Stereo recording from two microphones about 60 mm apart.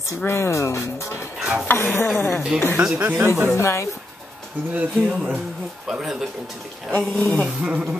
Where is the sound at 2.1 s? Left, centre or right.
Left.